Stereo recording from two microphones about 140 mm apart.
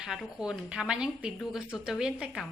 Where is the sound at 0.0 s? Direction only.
Centre (ahead or behind).